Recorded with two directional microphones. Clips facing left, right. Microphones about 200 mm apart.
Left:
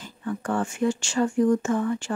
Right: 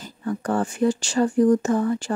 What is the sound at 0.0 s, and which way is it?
Speech, 40° right (ahead or behind).